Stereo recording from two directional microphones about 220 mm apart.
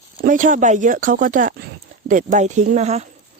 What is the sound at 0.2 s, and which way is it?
Speech, 35° right (ahead or behind).